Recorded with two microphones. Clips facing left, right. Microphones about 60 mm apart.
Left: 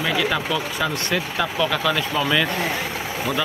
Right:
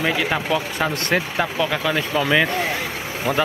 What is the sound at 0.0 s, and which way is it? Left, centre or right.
Speech, right.